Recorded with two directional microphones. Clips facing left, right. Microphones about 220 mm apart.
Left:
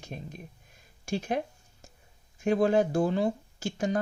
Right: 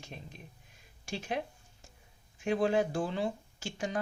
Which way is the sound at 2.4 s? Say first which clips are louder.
Left 5 dB; 45° left (ahead or behind).